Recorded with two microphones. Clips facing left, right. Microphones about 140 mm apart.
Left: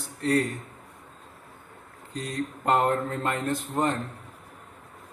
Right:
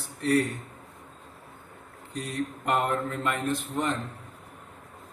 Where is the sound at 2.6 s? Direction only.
35° left (ahead or behind).